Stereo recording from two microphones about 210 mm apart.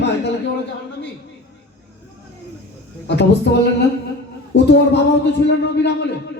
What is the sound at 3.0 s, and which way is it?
A man's voice, 55° left (ahead or behind).